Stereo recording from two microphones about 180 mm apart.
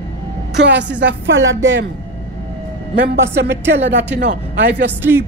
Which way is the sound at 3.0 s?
75° right (ahead or behind).